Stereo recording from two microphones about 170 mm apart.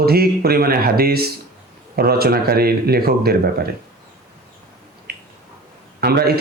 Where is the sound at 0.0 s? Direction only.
65° right (ahead or behind).